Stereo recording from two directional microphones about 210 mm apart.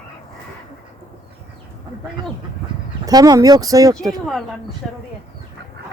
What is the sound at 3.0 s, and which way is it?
Speech, 20° right (ahead or behind).